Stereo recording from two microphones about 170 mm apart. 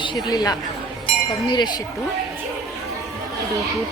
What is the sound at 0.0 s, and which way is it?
A woman's voice, 25° left (ahead or behind).